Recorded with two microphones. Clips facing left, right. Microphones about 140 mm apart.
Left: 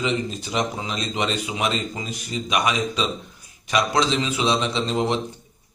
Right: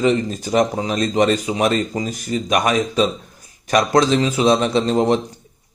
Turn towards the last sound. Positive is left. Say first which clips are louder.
# right 7 dB
turn(degrees=-45)  # may be behind; listen again after turning